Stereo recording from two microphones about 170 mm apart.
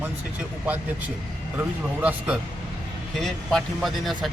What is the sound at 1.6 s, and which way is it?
Speech, 10° right (ahead or behind).